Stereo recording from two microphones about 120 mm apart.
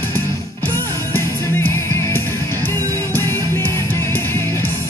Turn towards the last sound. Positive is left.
turn(degrees=20)  # may be behind; listen again after turning